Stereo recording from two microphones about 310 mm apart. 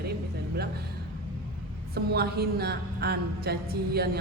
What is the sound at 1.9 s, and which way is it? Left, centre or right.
A woman's voice, right.